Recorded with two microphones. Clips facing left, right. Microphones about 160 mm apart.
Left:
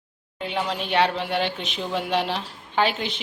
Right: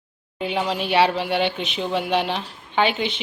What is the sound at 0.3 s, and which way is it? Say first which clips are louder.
Speech: right 3 dB; 5° right (ahead or behind).